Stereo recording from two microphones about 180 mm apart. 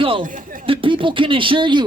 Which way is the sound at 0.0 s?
30° right (ahead or behind).